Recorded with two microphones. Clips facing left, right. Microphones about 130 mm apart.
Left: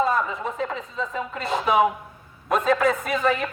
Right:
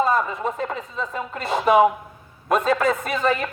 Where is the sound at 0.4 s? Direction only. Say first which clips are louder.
Right 2 dB; 50° right (ahead or behind).